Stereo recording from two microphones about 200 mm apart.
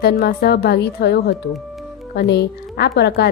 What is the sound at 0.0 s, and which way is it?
Speech, 50° left (ahead or behind).